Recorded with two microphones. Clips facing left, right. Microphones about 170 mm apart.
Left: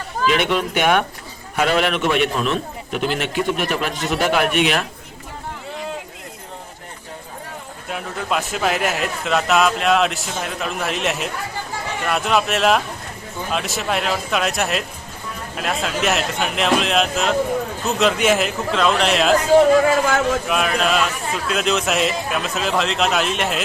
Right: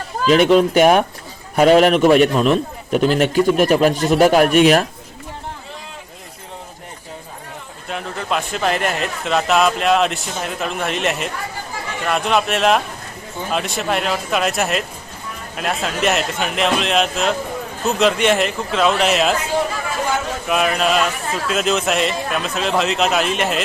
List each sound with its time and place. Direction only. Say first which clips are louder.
0.3 s a man's voice: right 8 dB; 40° right (ahead or behind)
7.9 s a man's voice: right 1 dB; 5° left (ahead or behind)
20.5 s a man's voice: right 2 dB; centre (ahead or behind)